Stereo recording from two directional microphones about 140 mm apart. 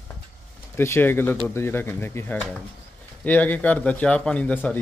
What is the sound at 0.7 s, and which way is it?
Speech, 15° left (ahead or behind).